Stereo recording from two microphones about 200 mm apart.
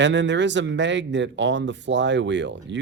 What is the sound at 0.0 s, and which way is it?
Speech, 65° right (ahead or behind).